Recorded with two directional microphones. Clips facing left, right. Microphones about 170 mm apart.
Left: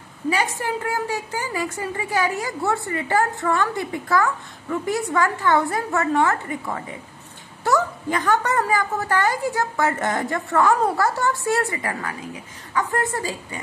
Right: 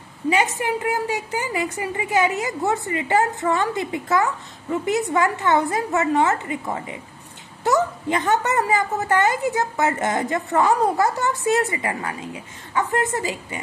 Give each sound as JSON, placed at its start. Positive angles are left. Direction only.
{"t": 0.3, "sound": "a woman's voice", "side_deg": -20}